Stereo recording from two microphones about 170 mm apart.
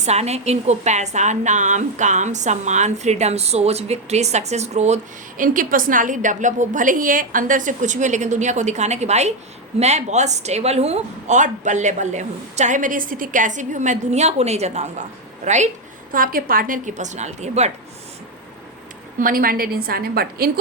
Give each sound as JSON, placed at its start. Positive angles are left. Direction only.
{"t": 0.0, "sound": "a woman's voice", "side_deg": -40}
{"t": 5.4, "sound": "speech", "side_deg": -55}
{"t": 16.1, "sound": "speech", "side_deg": -55}
{"t": 19.2, "sound": "a woman's voice", "side_deg": -55}